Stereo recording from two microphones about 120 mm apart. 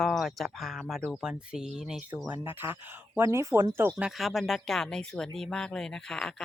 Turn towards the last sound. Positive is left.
turn(degrees=5)  # may be behind; listen again after turning